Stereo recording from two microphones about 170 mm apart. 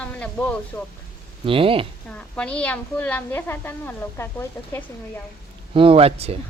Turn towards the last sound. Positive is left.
turn(degrees=-35)  # may be behind; listen again after turning